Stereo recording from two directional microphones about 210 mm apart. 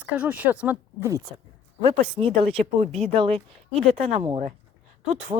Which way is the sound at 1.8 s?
30° right (ahead or behind).